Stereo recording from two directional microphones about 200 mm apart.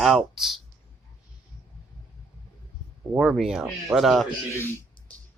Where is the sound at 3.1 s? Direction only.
Centre (ahead or behind).